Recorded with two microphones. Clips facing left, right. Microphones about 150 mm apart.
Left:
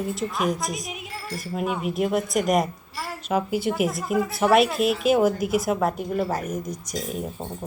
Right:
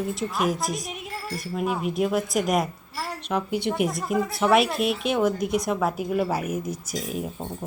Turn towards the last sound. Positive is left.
turn(degrees=-5)  # may be behind; listen again after turning